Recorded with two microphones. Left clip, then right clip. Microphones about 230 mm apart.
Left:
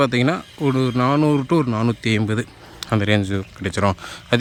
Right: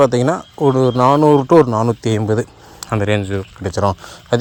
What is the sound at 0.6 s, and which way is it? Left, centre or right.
Speech, centre.